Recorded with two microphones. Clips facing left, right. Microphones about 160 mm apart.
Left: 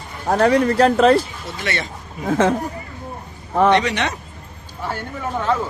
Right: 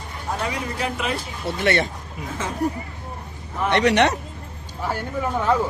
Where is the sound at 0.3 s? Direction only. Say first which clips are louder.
Left 12 dB; 70° left (ahead or behind); by 1.2 s 90° left.